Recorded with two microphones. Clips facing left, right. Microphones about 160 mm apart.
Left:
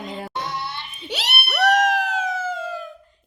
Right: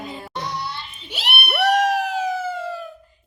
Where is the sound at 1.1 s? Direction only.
75° left (ahead or behind).